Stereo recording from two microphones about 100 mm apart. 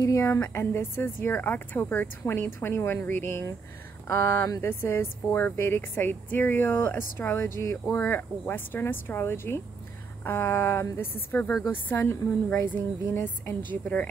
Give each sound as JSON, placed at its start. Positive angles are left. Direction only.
{"t": 0.0, "sound": "speech", "side_deg": 30}